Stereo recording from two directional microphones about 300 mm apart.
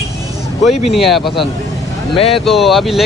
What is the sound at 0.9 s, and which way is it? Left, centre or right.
Speech, centre.